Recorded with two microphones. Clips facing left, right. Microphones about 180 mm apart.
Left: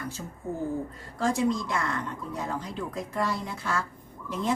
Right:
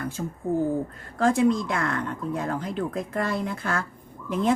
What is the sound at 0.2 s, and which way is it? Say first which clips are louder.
Speech: right 9 dB; 55° right (ahead or behind).